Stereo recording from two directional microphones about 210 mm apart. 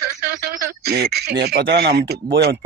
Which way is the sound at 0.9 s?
45° right (ahead or behind).